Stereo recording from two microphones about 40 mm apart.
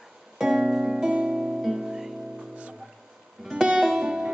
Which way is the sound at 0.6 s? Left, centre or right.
Right.